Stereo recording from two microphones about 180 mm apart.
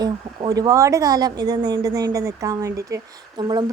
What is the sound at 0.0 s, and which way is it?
Speech, 20° right (ahead or behind).